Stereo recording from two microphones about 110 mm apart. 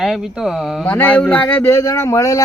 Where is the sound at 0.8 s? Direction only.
15° left (ahead or behind).